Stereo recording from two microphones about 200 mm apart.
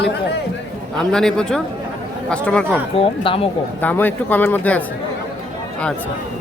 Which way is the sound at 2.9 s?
25° left (ahead or behind).